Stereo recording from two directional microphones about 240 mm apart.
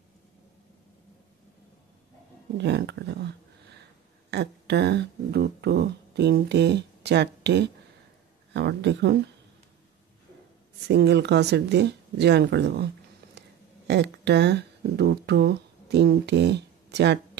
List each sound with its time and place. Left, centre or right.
2.5 s speech: right
4.3 s speech: right
10.9 s speech: right
13.2 s a sound: right
13.8 s speech: right